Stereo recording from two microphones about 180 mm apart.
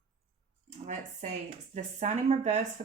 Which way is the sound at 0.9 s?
40° right (ahead or behind).